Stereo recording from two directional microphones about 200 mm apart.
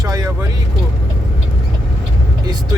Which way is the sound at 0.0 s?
20° right (ahead or behind).